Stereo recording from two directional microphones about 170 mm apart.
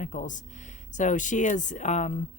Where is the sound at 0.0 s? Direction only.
50° left (ahead or behind).